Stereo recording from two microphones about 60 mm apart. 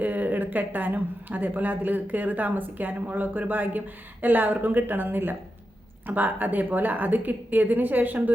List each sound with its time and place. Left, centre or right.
0.0 s a woman's voice: right